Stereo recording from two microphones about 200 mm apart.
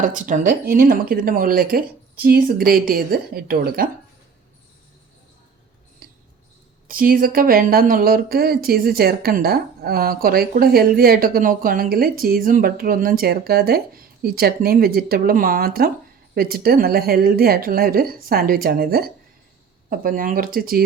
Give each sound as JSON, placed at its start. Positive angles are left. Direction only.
{"t": 0.0, "sound": "speech", "side_deg": -40}
{"t": 6.8, "sound": "speech", "side_deg": -45}